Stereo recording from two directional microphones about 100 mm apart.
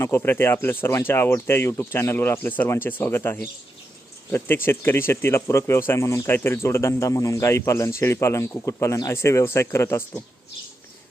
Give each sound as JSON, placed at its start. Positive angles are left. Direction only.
{"t": 0.0, "sound": "speech", "side_deg": 25}